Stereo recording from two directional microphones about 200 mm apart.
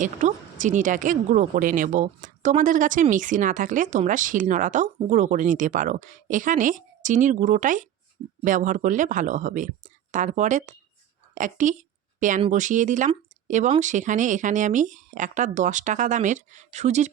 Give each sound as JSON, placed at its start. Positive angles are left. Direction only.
{"t": 0.0, "sound": "a woman's voice", "side_deg": -40}